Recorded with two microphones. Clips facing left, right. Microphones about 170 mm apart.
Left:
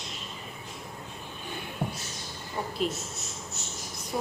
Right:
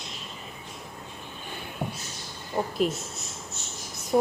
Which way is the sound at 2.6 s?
40° right (ahead or behind).